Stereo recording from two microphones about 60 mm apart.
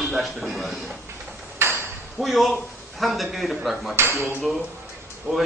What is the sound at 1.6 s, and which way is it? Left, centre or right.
Ping, right.